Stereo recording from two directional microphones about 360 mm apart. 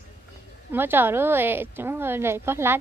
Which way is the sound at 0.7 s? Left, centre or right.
Centre.